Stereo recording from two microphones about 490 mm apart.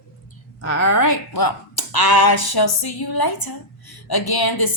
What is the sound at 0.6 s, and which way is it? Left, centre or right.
Speech, left.